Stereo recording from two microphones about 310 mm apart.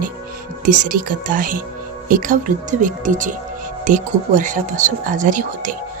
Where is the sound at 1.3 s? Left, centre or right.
Right.